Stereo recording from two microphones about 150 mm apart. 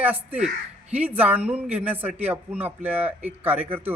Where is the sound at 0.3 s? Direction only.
50° right (ahead or behind).